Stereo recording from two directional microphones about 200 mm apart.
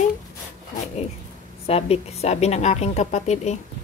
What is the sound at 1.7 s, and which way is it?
A woman's voice, 30° left (ahead or behind).